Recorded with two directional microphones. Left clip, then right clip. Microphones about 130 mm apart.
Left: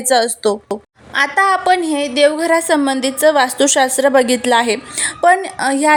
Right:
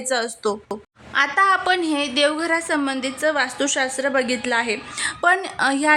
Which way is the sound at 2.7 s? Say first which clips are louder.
Left 8 dB; 45° left (ahead or behind).